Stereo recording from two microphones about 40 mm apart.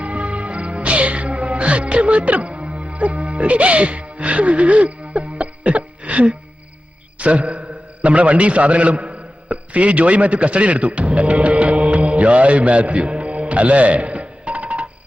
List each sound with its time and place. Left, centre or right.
0.0 s music: right
7.2 s a man's voice: right